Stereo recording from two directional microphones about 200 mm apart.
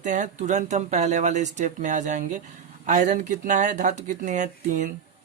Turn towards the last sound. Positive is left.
turn(degrees=-35)  # may be behind; listen again after turning